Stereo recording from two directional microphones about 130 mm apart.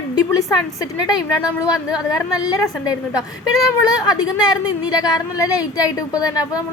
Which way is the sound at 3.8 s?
30° left (ahead or behind).